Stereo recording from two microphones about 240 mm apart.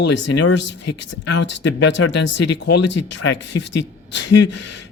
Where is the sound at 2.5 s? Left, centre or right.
Left.